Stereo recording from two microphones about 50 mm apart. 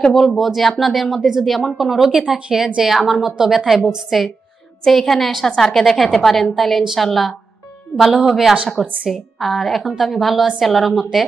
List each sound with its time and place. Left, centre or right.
0.1 s speech: centre
2.3 s speech: right
2.8 s speech: centre